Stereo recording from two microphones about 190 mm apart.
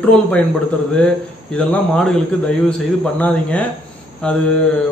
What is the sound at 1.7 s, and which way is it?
A man's voice, 5° left (ahead or behind).